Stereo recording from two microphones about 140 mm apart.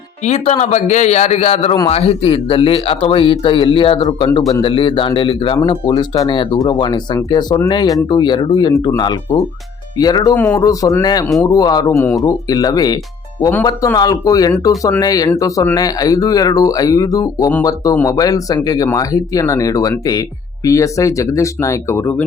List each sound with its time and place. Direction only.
0.3 s a man's voice: 50° left (ahead or behind); by 10.3 s 30° left (ahead or behind)
10.3 s speech: 15° left (ahead or behind)
11.9 s speech: 15° left (ahead or behind)
12.3 s speech: 30° left (ahead or behind)